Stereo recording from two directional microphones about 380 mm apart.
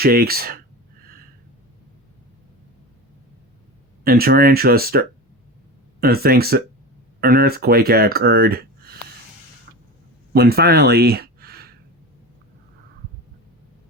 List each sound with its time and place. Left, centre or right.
0.0 s speech: right
4.0 s speech: right
10.3 s speech: right